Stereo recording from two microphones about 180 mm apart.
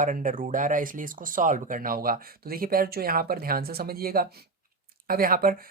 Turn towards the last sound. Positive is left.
turn(degrees=-55)  # may be behind; listen again after turning